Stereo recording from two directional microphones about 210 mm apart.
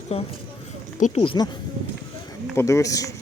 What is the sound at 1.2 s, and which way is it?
Speech, 25° left (ahead or behind).